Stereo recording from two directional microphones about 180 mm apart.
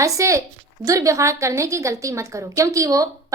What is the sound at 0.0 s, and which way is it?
Speech, 15° right (ahead or behind).